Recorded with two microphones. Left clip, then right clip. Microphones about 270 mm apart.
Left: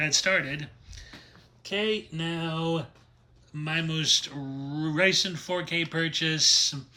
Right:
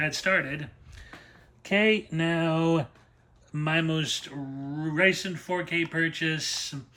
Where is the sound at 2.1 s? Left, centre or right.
Right.